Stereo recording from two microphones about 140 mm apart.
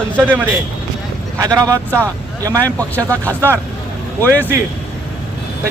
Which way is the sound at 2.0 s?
25° right (ahead or behind).